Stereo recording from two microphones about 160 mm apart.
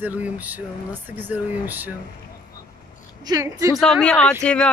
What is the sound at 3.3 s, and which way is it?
Speech, 20° right (ahead or behind).